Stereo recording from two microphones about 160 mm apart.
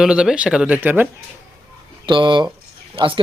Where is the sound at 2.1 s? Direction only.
30° right (ahead or behind).